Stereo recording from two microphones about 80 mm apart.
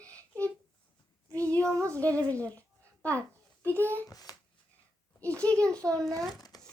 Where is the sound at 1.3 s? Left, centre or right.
Centre.